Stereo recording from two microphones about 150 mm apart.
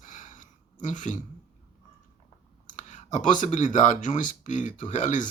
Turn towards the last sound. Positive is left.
turn(degrees=55)  # may be behind; listen again after turning